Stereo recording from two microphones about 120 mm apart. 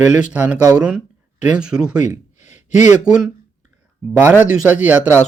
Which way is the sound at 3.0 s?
5° right (ahead or behind).